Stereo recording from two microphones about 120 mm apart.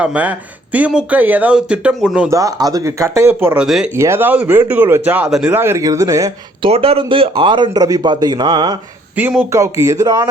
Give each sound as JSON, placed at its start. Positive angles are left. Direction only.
{"t": 0.0, "sound": "speech", "side_deg": -10}
{"t": 2.3, "sound": "speech", "side_deg": -30}
{"t": 3.6, "sound": "speech", "side_deg": -5}
{"t": 3.9, "sound": "speech", "side_deg": -20}
{"t": 6.6, "sound": "a man's voice", "side_deg": -55}
{"t": 9.2, "sound": "speech", "side_deg": -15}
{"t": 9.5, "sound": "speech", "side_deg": -25}